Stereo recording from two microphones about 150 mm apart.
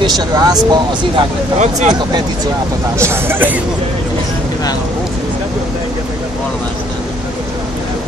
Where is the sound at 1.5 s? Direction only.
50° right (ahead or behind).